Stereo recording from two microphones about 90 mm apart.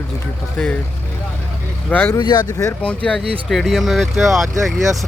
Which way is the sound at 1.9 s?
20° left (ahead or behind).